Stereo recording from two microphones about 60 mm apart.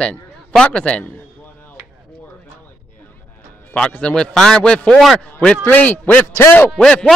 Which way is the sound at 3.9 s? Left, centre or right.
Centre.